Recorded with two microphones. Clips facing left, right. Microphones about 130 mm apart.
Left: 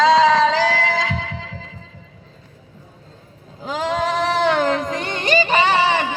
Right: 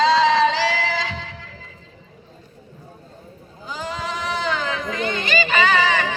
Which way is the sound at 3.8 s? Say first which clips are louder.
Left 8 dB; 90° left.